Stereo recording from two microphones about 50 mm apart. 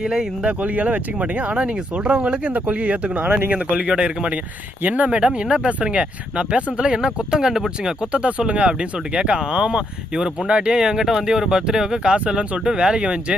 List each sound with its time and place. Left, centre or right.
0.0 s speech: centre
0.4 s speech: right
2.5 s speech: right
4.8 s speech: right; by 7.9 s centre
8.1 s speech: right